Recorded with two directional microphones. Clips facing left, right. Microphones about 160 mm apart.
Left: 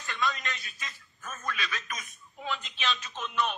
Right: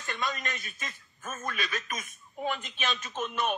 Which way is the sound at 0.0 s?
50° right (ahead or behind).